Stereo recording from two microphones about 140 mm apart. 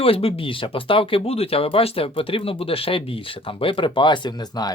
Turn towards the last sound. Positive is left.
turn(degrees=30)  # may be behind; listen again after turning